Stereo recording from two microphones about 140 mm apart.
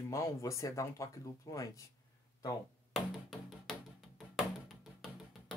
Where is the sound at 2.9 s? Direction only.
5° left (ahead or behind).